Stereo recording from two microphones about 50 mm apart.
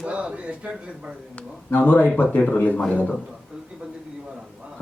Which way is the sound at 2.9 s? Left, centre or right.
Left.